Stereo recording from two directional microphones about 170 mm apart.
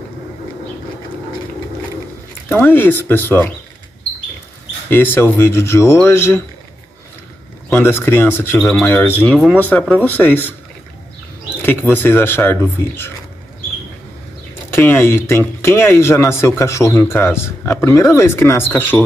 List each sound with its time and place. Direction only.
2.5 s speech: 10° left (ahead or behind)
4.8 s speech: 10° left (ahead or behind)
7.7 s speech: 15° left (ahead or behind)
8.5 s speech: centre (ahead or behind)
8.8 s speech: 15° left (ahead or behind)
11.6 s speech: 15° left (ahead or behind)
14.7 s speech: 15° left (ahead or behind)